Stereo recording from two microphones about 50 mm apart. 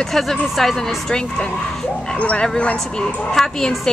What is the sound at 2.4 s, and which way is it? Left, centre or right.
A woman's voice, centre.